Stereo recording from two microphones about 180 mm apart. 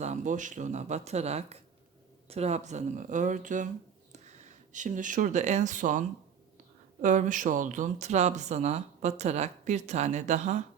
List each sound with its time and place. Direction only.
0.0 s speech: 40° right (ahead or behind)